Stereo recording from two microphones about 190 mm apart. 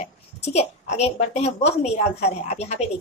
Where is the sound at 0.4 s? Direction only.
35° left (ahead or behind).